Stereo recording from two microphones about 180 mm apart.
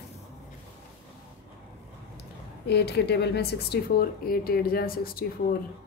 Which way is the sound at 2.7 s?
65° left (ahead or behind).